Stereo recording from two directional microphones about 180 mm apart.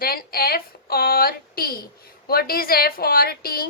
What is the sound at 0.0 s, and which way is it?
A woman's voice, 55° left (ahead or behind).